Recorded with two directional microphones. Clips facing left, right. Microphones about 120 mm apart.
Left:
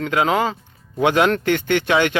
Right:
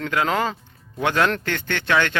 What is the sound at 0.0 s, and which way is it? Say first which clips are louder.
Speech: left 3 dB; 15° left (ahead or behind).